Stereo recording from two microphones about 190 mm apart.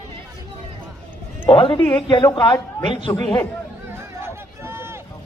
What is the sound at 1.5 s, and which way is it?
A man's voice, 25° left (ahead or behind).